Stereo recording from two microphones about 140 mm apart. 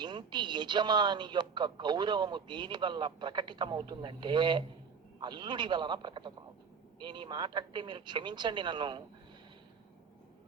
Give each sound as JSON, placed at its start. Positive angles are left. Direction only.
{"t": 0.0, "sound": "speech", "side_deg": -30}